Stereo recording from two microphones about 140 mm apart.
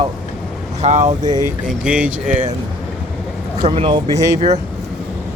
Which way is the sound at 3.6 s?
40° right (ahead or behind).